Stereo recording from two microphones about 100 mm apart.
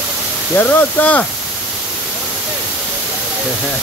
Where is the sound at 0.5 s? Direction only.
15° left (ahead or behind).